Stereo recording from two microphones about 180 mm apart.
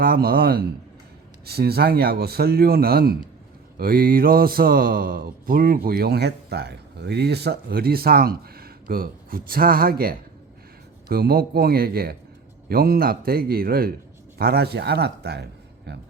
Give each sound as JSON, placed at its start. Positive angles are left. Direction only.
{"t": 0.0, "sound": "speech", "side_deg": -55}